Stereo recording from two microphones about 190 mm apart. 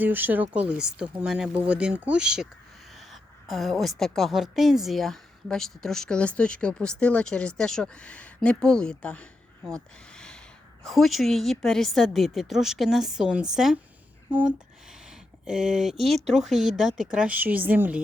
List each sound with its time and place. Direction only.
0.0 s a woman's voice: 10° right (ahead or behind); by 9.2 s 5° left (ahead or behind)
9.6 s a sound: 5° left (ahead or behind)
10.8 s a woman's voice: centre (ahead or behind)